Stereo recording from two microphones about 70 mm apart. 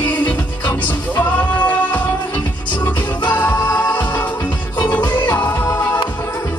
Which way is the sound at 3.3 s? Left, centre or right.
Left.